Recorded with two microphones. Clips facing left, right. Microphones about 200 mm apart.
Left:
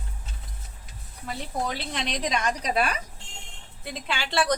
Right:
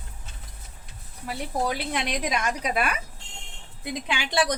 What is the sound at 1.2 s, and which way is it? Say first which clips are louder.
A woman's voice: right 3 dB; 10° right (ahead or behind).